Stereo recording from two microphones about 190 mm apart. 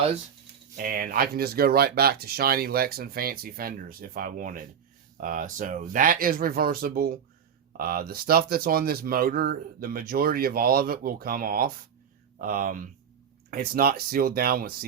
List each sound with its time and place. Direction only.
0.8 s speech: 45° right (ahead or behind)